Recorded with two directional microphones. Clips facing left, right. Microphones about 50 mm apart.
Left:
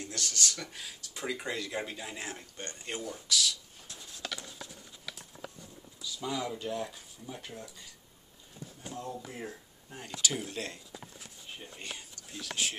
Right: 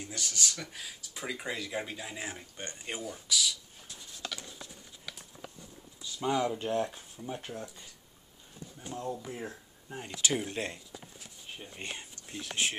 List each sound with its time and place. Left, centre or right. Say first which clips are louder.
0.0 s speech: left 1 dB; centre
2.5 s speech: even; centre
6.0 s speech: right 5 dB; right
8.9 s speech: right 3 dB; centre
10.2 s speech: right 3 dB; right
11.8 s speech: right 5 dB; right